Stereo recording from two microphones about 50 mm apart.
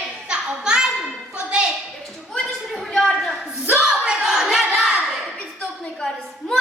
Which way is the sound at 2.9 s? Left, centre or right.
Centre.